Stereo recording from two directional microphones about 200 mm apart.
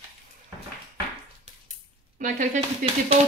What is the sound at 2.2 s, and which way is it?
Speech, 40° right (ahead or behind).